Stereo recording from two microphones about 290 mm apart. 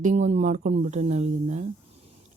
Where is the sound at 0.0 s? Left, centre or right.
Right.